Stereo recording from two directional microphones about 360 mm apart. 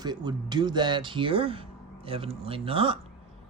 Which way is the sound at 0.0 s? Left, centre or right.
Centre.